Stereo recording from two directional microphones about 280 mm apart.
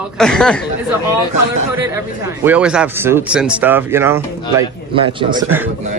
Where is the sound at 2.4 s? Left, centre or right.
Centre.